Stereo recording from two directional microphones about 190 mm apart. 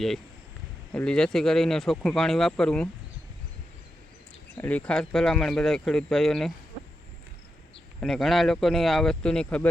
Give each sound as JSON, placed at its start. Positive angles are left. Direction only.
{"t": 0.9, "sound": "speech", "side_deg": 5}
{"t": 4.5, "sound": "speech", "side_deg": 10}
{"t": 8.0, "sound": "speech", "side_deg": 0}